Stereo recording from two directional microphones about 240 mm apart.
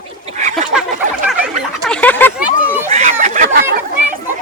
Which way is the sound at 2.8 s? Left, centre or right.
Right.